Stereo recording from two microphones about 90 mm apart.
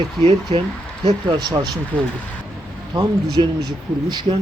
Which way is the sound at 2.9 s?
50° right (ahead or behind).